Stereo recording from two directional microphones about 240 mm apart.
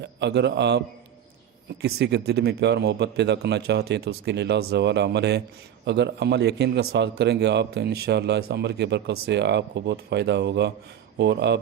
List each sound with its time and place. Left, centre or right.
0.0 s a man's voice: right
1.8 s a man's voice: right